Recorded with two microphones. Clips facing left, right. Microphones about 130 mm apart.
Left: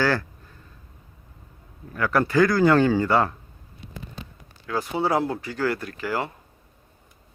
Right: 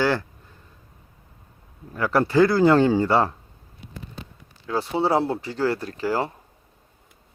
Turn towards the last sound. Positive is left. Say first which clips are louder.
# right 3 dB
turn(degrees=-35)  # may be behind; listen again after turning